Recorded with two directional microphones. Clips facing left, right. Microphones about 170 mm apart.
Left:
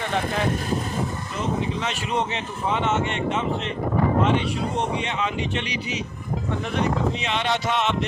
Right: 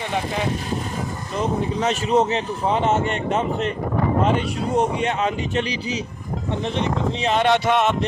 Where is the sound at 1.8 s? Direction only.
40° right (ahead or behind).